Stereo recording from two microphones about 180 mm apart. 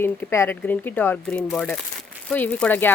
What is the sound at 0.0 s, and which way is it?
Speech, 15° left (ahead or behind).